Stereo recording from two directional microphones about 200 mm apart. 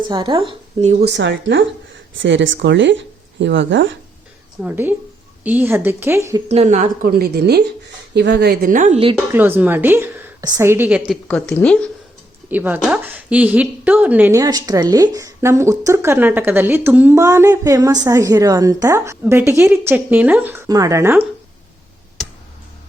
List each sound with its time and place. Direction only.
0.0 s speech: 25° right (ahead or behind)
1.0 s speech: 60° right (ahead or behind)
4.6 s speech: 10° right (ahead or behind)
6.5 s a woman's voice: 35° right (ahead or behind)
9.1 s speech: 10° right (ahead or behind)
11.3 s a woman's voice: 5° left (ahead or behind)
12.5 s speech: 10° right (ahead or behind)